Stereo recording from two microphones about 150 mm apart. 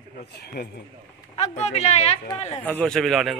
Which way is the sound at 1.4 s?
45° left (ahead or behind).